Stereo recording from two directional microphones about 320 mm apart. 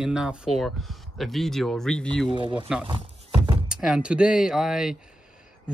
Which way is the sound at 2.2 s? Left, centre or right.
Centre.